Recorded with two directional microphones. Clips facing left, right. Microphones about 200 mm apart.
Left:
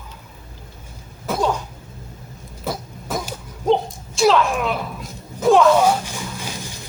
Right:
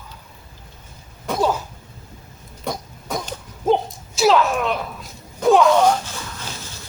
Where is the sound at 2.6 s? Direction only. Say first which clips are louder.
Left 1 dB; 5° left (ahead or behind).